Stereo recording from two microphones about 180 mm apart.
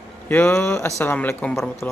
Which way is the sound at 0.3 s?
10° left (ahead or behind).